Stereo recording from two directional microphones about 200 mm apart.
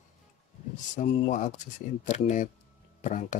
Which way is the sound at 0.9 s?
35° left (ahead or behind).